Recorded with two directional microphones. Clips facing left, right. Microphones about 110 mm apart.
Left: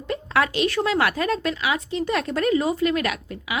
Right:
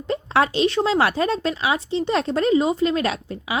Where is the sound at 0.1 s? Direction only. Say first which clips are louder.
Right 3 dB; 25° right (ahead or behind).